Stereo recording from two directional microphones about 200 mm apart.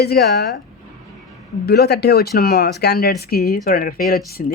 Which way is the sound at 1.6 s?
55° left (ahead or behind).